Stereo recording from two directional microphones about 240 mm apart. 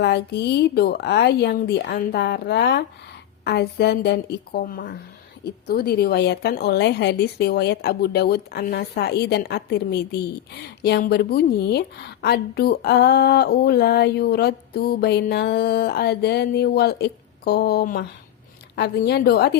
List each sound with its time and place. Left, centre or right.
0.0 s a woman's voice: left